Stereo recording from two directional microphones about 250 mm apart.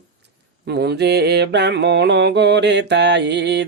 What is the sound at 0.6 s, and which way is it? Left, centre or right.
Mantra, right.